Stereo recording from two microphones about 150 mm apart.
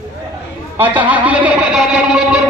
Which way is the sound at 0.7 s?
10° right (ahead or behind).